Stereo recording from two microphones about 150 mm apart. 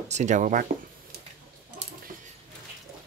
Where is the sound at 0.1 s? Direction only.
55° right (ahead or behind).